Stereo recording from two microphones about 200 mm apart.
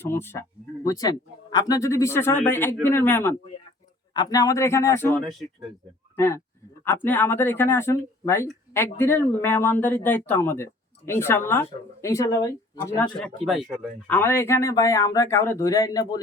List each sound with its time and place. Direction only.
0.0 s speech: 10° left (ahead or behind)
5.1 s speech: centre (ahead or behind)
6.1 s speech: 15° left (ahead or behind)
13.1 s speech: centre (ahead or behind)
14.1 s speech: 10° left (ahead or behind)